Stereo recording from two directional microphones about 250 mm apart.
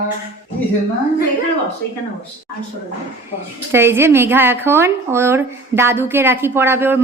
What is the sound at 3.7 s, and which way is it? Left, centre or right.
Speech, centre.